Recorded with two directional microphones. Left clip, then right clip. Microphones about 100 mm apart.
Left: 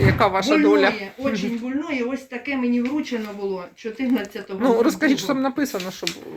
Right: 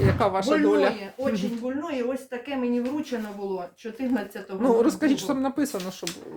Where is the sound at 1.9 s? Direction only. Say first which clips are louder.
Left 2 dB; 40° right (ahead or behind).